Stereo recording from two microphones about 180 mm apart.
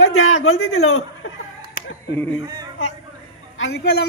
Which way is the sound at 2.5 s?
25° right (ahead or behind).